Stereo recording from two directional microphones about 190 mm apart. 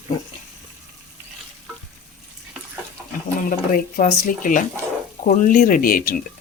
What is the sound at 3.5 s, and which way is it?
Speech, 45° left (ahead or behind).